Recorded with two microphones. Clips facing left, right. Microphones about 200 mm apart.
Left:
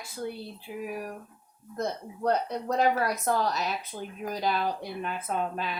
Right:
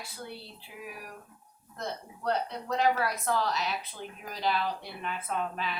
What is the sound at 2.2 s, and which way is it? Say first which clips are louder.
A woman's voice: left 4 dB; 45° left (ahead or behind).